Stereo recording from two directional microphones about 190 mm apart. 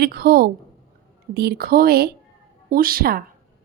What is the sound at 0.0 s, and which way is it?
Speech, 55° right (ahead or behind).